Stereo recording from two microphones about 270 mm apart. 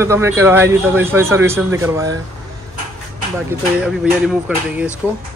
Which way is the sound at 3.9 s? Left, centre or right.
Centre.